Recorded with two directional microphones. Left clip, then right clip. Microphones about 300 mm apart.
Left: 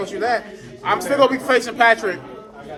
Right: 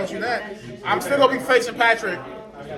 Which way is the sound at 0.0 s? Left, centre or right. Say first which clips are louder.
Left 3 dB; left.